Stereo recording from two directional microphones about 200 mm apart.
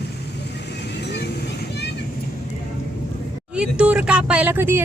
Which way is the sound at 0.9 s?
55° left (ahead or behind).